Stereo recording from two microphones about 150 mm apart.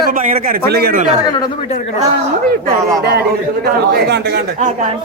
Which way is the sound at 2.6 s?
90° right.